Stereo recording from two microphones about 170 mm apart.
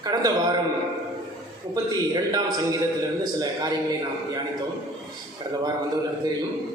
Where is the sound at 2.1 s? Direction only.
20° right (ahead or behind).